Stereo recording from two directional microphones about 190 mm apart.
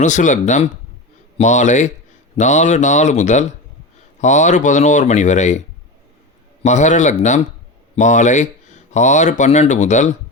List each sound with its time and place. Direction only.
0.0 s speech: 40° left (ahead or behind)